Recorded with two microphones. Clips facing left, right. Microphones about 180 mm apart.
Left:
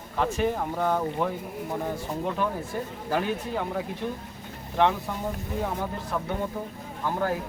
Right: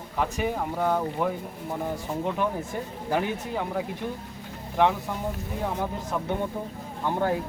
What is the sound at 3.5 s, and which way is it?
Speech, 5° right (ahead or behind).